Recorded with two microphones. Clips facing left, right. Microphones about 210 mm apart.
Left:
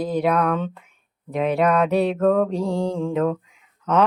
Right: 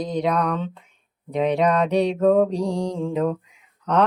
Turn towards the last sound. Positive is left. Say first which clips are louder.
# left 1 dB
turn(degrees=5)  # may be behind; listen again after turning